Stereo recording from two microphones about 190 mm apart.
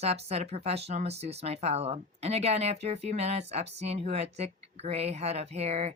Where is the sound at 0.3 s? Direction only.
35° right (ahead or behind).